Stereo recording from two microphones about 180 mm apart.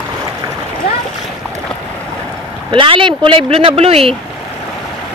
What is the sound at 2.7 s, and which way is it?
Speech, 30° right (ahead or behind).